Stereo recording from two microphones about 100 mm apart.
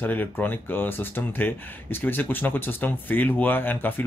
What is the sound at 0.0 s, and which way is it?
Speech, 20° left (ahead or behind).